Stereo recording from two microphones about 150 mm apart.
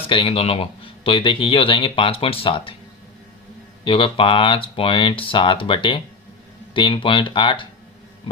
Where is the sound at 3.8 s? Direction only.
35° left (ahead or behind).